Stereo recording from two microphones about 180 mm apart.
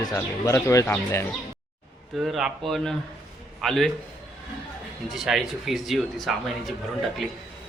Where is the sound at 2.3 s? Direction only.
Centre (ahead or behind).